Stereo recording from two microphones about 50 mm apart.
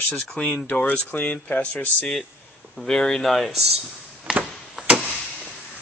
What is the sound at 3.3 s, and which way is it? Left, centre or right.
Speech, centre.